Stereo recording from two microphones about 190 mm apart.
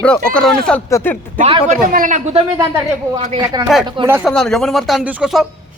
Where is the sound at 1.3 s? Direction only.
30° right (ahead or behind).